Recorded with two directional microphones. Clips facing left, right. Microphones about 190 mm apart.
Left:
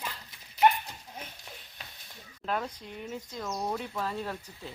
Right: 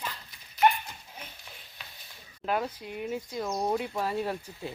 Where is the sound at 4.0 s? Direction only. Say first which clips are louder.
Right 4 dB; 10° right (ahead or behind).